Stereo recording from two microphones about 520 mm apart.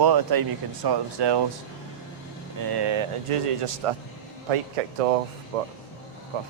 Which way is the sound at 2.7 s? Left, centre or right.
Right.